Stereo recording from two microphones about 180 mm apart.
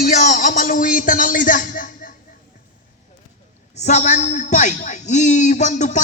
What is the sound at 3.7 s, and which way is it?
A man's voice, 40° left (ahead or behind).